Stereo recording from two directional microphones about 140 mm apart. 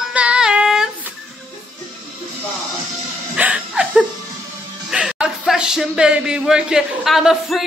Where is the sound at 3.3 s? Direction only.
10° right (ahead or behind).